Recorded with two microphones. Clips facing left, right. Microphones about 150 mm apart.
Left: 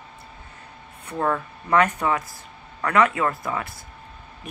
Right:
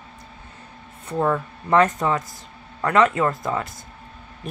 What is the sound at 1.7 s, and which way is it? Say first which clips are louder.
Speech: right 2 dB; 30° right (ahead or behind).